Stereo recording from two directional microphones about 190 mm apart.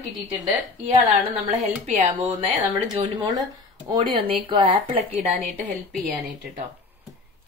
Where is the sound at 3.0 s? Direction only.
25° right (ahead or behind).